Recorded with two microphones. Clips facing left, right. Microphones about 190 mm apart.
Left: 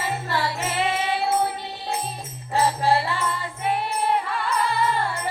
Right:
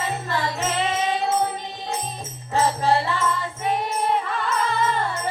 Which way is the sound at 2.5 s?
20° right (ahead or behind).